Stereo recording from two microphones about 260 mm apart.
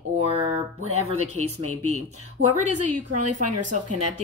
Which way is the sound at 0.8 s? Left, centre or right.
Right.